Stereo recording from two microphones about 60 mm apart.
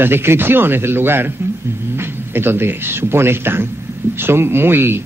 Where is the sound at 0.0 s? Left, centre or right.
Right.